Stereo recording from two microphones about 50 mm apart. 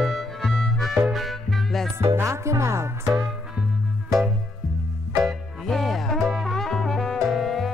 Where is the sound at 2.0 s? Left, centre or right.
Right.